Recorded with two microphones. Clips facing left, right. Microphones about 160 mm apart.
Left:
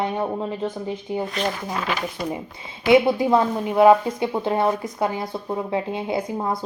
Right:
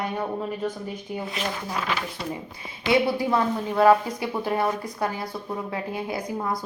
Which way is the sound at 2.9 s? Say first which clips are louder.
Left 6 dB; 20° left (ahead or behind).